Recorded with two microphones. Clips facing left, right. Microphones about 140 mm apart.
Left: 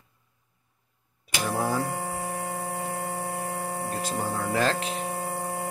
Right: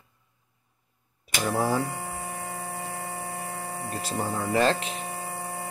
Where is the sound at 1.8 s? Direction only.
45° left (ahead or behind).